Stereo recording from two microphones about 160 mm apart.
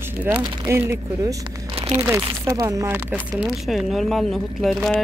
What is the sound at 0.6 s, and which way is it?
Speech, 15° right (ahead or behind).